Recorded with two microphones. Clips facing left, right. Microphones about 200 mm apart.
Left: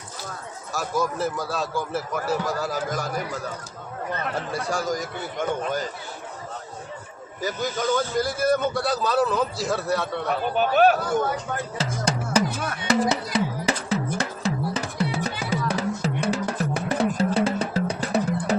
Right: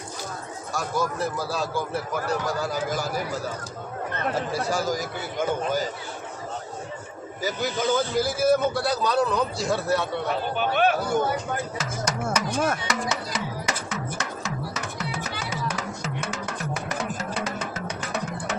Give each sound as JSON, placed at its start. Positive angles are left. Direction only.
{"t": 0.7, "sound": "a man's voice", "side_deg": 0}
{"t": 4.5, "sound": "a man's voice", "side_deg": 0}
{"t": 7.4, "sound": "a man's voice", "side_deg": -5}
{"t": 10.6, "sound": "a man's voice", "side_deg": 40}
{"t": 11.1, "sound": "a man's voice", "side_deg": 0}
{"t": 12.0, "sound": "music", "side_deg": 30}
{"t": 12.5, "sound": "music", "side_deg": -45}
{"t": 13.1, "sound": "music", "side_deg": 35}